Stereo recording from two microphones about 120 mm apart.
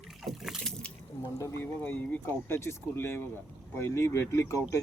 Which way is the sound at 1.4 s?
20° left (ahead or behind).